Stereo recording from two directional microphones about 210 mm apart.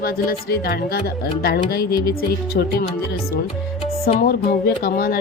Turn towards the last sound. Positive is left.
turn(degrees=45)  # may be behind; listen again after turning